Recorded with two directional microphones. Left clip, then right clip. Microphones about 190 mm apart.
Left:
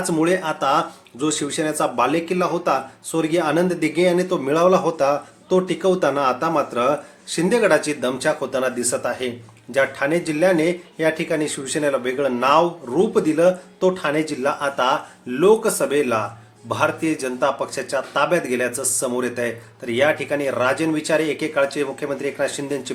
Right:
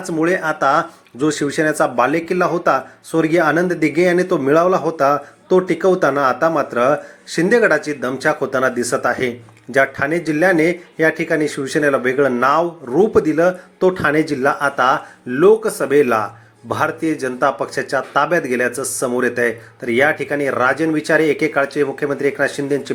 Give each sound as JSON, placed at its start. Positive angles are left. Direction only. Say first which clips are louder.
{"t": 0.0, "sound": "speech", "louder": "right 2 dB", "side_deg": -20}